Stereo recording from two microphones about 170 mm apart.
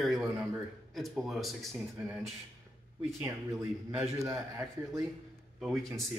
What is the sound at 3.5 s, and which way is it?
Speech, 15° right (ahead or behind).